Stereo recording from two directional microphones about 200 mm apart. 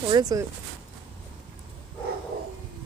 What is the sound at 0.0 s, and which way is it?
Speech, 20° right (ahead or behind).